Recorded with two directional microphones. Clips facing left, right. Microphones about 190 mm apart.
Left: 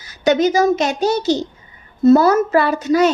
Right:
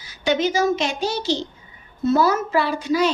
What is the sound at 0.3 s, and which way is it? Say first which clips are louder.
A woman's voice: left 5 dB; 40° left (ahead or behind).